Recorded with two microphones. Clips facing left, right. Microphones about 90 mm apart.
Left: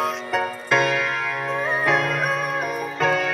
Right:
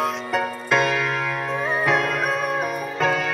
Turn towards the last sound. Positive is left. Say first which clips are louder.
# left 1 dB
turn(degrees=0)  # may be behind; listen again after turning